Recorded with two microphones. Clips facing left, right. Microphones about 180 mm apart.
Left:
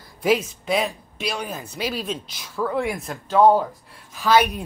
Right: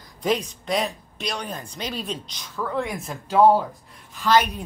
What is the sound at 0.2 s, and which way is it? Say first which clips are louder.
Speech: left 3 dB; 5° left (ahead or behind).